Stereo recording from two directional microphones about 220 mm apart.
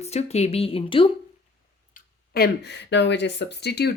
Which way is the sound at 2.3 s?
50° left (ahead or behind).